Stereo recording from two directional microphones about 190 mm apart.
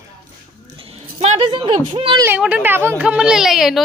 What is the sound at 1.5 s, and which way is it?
Speech, 30° right (ahead or behind).